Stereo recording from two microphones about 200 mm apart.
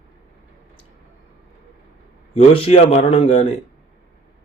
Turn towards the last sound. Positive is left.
turn(degrees=30)  # may be behind; listen again after turning